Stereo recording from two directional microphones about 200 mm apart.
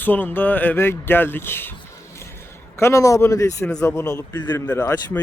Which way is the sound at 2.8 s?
15° left (ahead or behind).